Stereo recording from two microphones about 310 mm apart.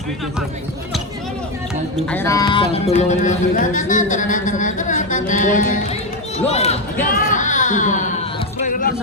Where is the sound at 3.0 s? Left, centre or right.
Left.